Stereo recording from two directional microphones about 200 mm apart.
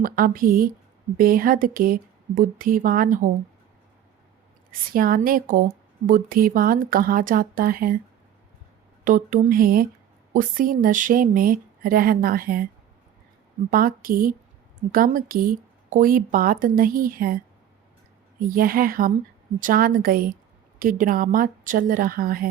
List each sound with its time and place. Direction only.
0.0 s speech: 45° right (ahead or behind)
4.9 s speech: 45° right (ahead or behind)
9.0 s speech: 40° right (ahead or behind)
13.7 s speech: 45° right (ahead or behind)